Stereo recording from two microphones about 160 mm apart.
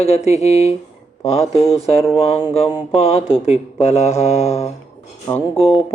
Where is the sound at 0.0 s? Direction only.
40° left (ahead or behind).